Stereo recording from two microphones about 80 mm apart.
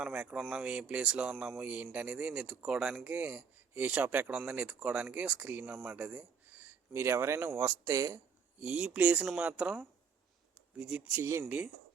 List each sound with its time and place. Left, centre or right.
0.0 s speech: centre; by 7.7 s right
7.9 s speech: right
8.6 s speech: centre
10.5 s a sound: centre
11.2 s speech: right
11.4 s speech: centre